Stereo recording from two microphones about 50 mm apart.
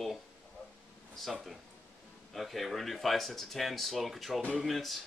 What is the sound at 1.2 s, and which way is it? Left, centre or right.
A man's voice, centre.